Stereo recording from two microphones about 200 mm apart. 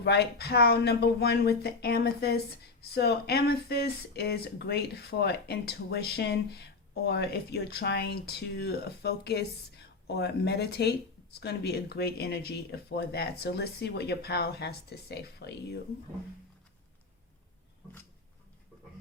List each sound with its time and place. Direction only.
0.0 s speech: 55° left (ahead or behind)